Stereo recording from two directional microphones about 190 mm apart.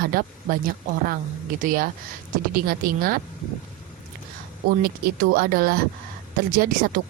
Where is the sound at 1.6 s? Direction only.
50° right (ahead or behind).